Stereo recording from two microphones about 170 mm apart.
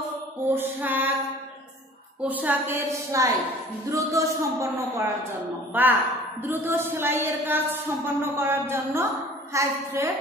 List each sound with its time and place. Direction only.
0.6 s speech: 10° right (ahead or behind)
2.2 s speech: 10° right (ahead or behind)